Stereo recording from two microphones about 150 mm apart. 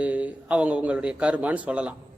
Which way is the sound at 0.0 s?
10° right (ahead or behind).